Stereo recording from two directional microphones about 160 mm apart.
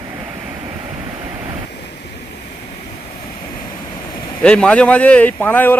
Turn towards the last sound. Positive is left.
turn(degrees=10)  # may be behind; listen again after turning